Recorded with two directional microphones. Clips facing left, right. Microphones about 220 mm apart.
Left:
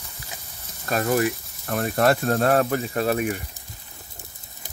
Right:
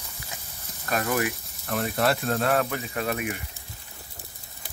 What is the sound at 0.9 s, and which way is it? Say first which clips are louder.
Speech: left 4 dB; 35° left (ahead or behind).